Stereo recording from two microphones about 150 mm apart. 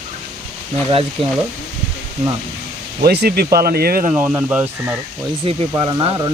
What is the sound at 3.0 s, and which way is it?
Speech, 90° right.